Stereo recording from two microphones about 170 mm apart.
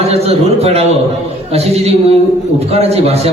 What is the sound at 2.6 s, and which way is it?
Speech, 40° right (ahead or behind).